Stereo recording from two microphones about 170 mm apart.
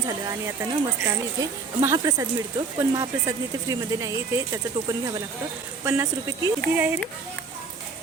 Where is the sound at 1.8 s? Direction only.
15° right (ahead or behind).